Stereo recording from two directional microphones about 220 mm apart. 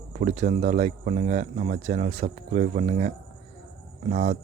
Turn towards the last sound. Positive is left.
turn(degrees=-30)  # may be behind; listen again after turning